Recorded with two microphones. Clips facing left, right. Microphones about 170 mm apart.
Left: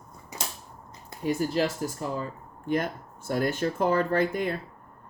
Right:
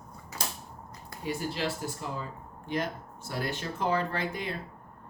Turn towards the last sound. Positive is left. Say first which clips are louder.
# left 8 dB
turn(degrees=50)  # may be behind; listen again after turning